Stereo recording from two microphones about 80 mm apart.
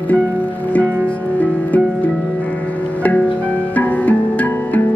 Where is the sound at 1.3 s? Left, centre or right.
Centre.